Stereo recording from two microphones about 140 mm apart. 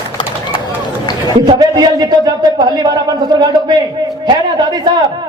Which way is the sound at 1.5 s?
30° right (ahead or behind).